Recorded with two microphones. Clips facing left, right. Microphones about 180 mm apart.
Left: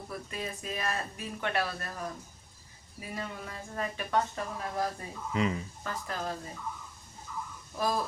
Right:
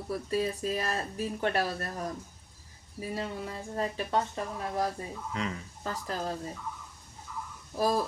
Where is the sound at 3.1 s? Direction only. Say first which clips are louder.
Right 3 dB; 30° right (ahead or behind).